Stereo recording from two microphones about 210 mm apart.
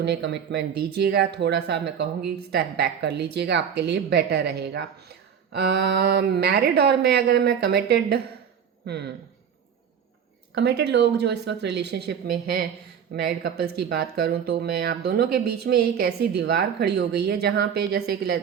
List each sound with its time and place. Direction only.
0.0 s speech: 55° right (ahead or behind)
10.5 s speech: 55° right (ahead or behind)